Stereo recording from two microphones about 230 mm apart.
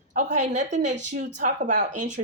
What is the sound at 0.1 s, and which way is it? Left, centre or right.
A woman's voice, right.